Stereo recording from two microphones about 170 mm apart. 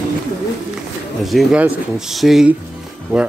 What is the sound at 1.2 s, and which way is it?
Speech, centre (ahead or behind).